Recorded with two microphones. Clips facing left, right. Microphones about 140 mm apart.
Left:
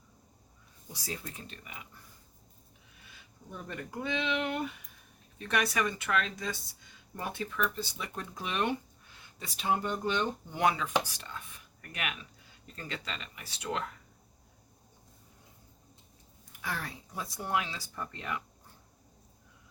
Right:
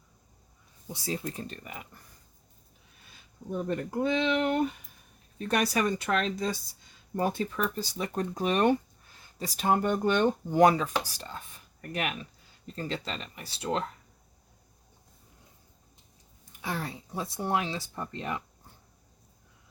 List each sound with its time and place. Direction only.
0.9 s speech: 25° right (ahead or behind); by 2.0 s 45° right (ahead or behind)
3.5 s speech: 40° right (ahead or behind)
16.6 s speech: 25° right (ahead or behind)